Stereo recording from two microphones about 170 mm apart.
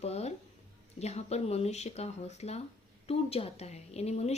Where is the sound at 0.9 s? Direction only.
40° left (ahead or behind).